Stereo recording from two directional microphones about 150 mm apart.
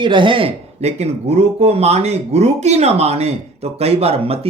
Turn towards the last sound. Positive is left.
turn(degrees=-40)  # may be behind; listen again after turning